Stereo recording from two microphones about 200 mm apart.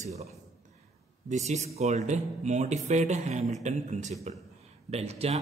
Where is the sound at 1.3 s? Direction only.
35° right (ahead or behind).